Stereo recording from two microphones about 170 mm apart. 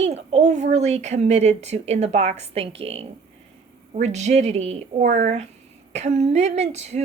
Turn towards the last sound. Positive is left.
turn(degrees=-40)  # may be behind; listen again after turning